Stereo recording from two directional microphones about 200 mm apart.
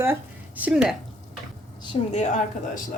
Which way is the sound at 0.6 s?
5° right (ahead or behind).